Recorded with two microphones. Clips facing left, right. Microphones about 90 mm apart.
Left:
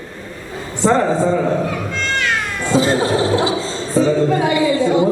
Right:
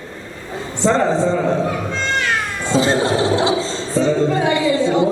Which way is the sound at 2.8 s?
25° right (ahead or behind).